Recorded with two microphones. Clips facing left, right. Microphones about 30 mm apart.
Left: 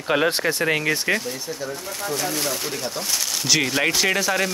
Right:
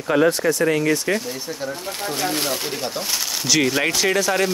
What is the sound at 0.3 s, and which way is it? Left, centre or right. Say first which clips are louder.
Speech: right 3 dB; left.